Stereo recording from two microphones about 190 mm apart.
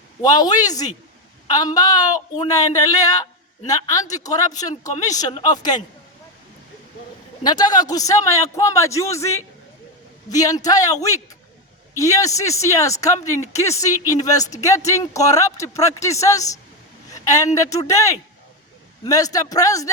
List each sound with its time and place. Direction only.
0.2 s speech: 20° left (ahead or behind)
7.4 s speech: 20° left (ahead or behind)